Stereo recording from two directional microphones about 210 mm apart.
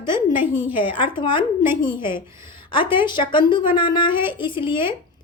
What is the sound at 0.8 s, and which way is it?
Speech, 25° left (ahead or behind).